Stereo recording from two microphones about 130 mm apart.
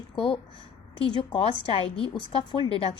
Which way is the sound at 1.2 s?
40° left (ahead or behind).